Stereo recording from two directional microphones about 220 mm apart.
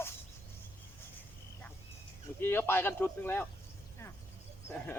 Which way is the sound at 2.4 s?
10° left (ahead or behind).